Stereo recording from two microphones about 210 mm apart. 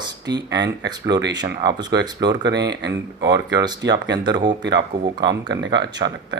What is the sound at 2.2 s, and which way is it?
Speech, 55° right (ahead or behind).